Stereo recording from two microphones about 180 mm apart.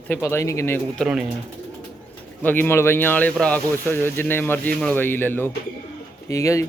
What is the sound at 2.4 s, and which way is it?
Speech, 10° left (ahead or behind).